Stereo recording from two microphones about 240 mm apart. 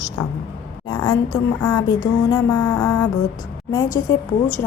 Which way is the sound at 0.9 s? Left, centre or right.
Centre.